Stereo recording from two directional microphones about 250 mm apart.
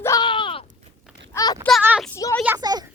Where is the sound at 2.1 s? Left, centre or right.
Centre.